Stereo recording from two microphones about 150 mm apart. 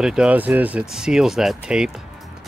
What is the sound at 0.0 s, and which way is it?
Speech, 5° right (ahead or behind).